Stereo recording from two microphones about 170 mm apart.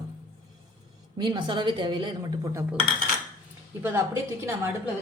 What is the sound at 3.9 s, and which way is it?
Speech, 15° right (ahead or behind).